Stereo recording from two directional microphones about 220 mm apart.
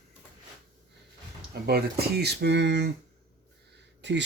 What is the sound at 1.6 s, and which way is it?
Speech, 45° right (ahead or behind).